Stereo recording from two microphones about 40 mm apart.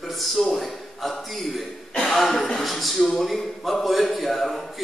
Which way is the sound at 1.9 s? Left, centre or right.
Centre.